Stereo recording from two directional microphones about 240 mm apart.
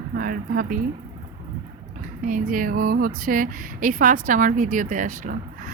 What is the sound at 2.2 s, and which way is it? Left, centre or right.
A woman's voice, right.